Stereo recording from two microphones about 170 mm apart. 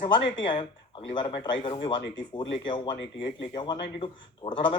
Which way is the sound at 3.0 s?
90° left.